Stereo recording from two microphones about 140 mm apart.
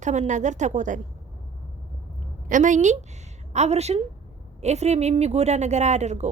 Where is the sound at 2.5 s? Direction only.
65° right (ahead or behind).